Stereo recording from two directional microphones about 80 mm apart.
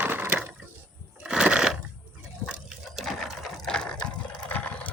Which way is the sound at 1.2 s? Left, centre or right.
Centre.